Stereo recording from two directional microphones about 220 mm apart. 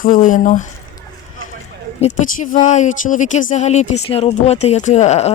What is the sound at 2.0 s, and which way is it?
Speech, 35° left (ahead or behind).